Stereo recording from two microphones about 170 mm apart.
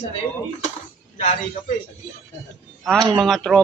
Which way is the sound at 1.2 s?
45° left (ahead or behind).